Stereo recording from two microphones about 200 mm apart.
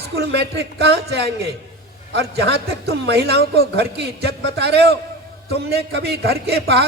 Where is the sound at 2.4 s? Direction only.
55° right (ahead or behind).